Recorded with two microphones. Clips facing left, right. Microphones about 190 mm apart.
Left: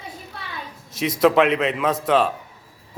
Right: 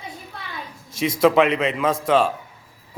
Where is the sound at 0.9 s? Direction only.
Centre (ahead or behind).